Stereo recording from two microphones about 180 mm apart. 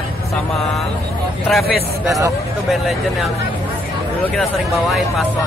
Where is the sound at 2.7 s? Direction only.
Centre (ahead or behind).